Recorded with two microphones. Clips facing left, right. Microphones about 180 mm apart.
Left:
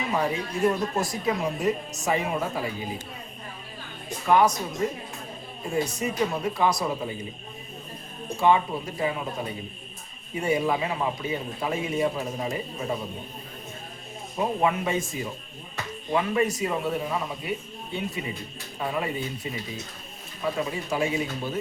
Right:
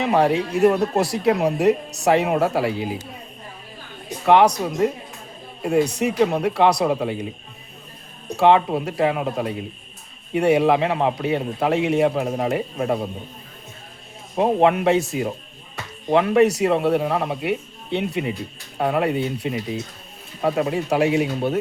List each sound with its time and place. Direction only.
0.0 s speech: 70° right (ahead or behind)
4.3 s speech: 70° right (ahead or behind)
8.4 s speech: 75° right (ahead or behind)
14.3 s speech: 65° right (ahead or behind)